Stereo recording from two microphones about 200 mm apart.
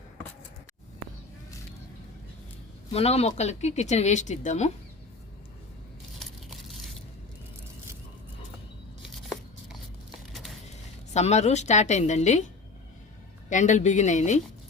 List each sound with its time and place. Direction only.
2.9 s speech: 30° left (ahead or behind)
9.0 s scissors: centre (ahead or behind)
11.1 s speech: 35° left (ahead or behind)
13.5 s speech: 35° left (ahead or behind)